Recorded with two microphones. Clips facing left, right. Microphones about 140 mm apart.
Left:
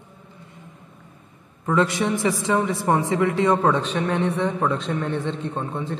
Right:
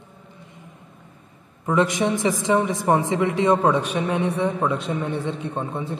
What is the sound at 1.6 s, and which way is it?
A man's voice, 20° right (ahead or behind).